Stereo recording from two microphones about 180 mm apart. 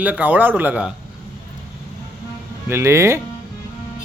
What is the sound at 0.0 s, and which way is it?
Speech, 10° right (ahead or behind).